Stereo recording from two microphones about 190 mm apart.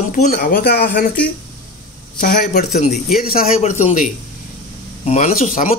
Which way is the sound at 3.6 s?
35° left (ahead or behind).